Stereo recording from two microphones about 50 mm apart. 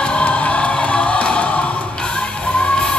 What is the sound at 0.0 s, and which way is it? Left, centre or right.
Music, left.